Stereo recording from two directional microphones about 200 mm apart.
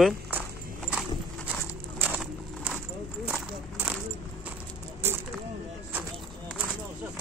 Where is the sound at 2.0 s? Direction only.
5° right (ahead or behind).